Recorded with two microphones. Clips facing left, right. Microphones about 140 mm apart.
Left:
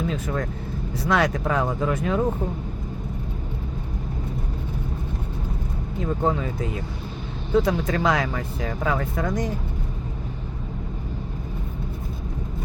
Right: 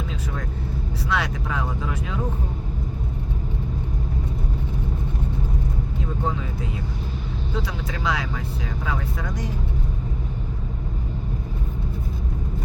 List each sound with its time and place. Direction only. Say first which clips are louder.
0.1 s speech: left 4 dB; 50° left (ahead or behind)
7.5 s speech: left 11 dB; 50° left (ahead or behind)